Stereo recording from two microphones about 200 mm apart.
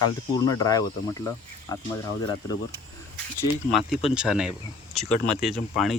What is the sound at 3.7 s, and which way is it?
Speech, centre (ahead or behind).